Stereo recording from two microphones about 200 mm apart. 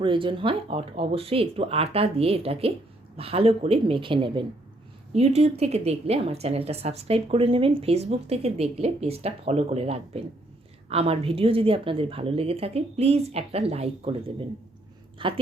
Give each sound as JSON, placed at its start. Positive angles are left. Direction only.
{"t": 0.0, "sound": "a woman's voice", "side_deg": -25}